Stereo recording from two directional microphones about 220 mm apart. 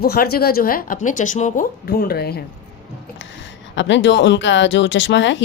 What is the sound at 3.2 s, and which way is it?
Speech, 55° left (ahead or behind).